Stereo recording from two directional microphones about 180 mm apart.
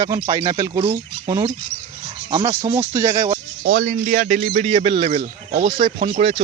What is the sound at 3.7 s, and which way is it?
Speech, 45° right (ahead or behind).